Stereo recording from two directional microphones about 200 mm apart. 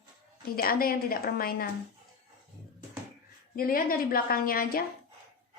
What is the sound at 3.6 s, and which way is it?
A woman's voice, 45° left (ahead or behind).